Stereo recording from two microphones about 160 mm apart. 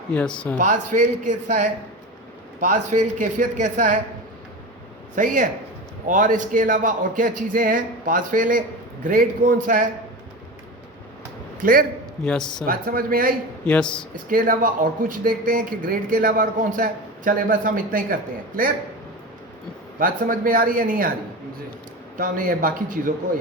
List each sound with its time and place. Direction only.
0.6 s speech: 50° right (ahead or behind)
5.1 s speech: 55° right (ahead or behind)
11.6 s speech: 65° right (ahead or behind)
20.0 s speech: 60° right (ahead or behind)
22.2 s speech: 60° right (ahead or behind)